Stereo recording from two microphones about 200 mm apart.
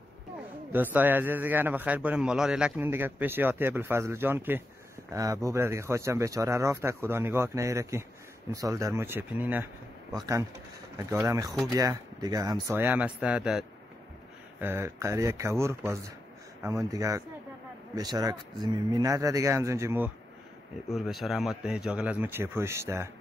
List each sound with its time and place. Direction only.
0.7 s a man's voice: 10° right (ahead or behind)
11.0 s a man's voice: 15° right (ahead or behind)
20.9 s a man's voice: centre (ahead or behind)